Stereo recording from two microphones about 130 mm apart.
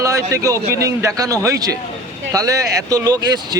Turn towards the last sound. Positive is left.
turn(degrees=-30)  # may be behind; listen again after turning